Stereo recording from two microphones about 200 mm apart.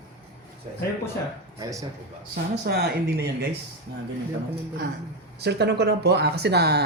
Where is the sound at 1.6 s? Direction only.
15° right (ahead or behind).